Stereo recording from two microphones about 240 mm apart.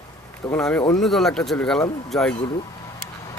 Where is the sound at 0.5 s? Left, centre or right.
Centre.